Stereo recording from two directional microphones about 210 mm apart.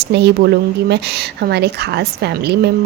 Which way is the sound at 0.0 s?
50° right (ahead or behind).